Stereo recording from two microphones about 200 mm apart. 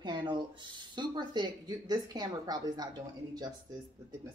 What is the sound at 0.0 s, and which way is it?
Speech, 20° right (ahead or behind).